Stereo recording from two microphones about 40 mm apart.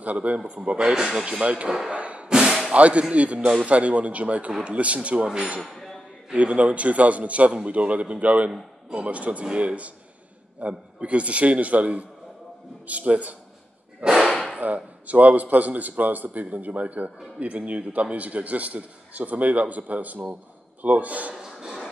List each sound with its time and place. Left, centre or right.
0.0 s a man's voice: right
0.4 s speech: right
1.4 s speech: right
2.0 s music: right
2.2 s a sound: centre
2.7 s a man's voice: right
5.6 s a sound: centre
6.3 s a man's voice: right
9.5 s a man's voice: right
14.0 s speech: centre
14.6 s a man's voice: right
21.4 s a sound: centre